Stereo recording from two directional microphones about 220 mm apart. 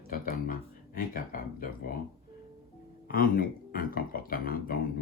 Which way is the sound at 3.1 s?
40° left (ahead or behind).